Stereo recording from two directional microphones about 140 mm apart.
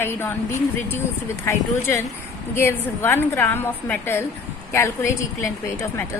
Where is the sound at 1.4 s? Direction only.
20° left (ahead or behind).